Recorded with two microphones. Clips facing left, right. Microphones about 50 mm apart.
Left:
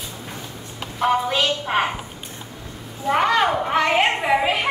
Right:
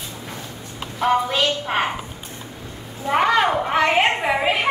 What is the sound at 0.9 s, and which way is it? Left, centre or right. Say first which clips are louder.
Speech: right 1 dB; centre.